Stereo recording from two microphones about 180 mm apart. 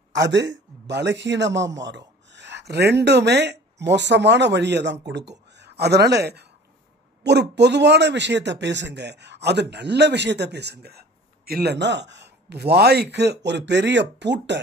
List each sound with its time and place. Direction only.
0.3 s a man's voice: 75° right (ahead or behind)